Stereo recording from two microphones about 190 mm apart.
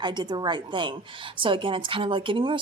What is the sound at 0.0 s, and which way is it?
A woman's voice, 25° right (ahead or behind).